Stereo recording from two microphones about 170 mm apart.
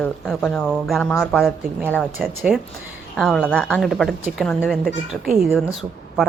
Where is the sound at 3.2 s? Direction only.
5° left (ahead or behind).